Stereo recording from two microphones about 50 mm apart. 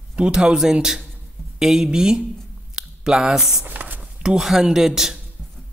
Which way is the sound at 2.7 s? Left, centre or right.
Centre.